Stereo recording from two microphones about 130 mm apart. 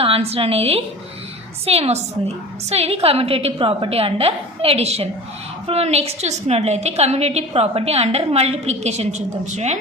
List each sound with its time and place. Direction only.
0.0 s a woman's voice: 50° right (ahead or behind)